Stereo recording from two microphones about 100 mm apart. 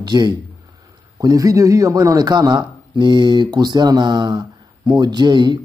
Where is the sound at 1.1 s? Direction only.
35° right (ahead or behind).